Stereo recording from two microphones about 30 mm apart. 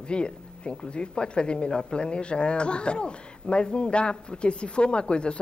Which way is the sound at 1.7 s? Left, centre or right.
Centre.